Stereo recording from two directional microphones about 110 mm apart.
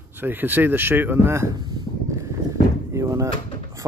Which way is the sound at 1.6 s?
40° right (ahead or behind).